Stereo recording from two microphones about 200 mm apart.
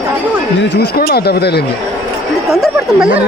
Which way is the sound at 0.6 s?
55° left (ahead or behind).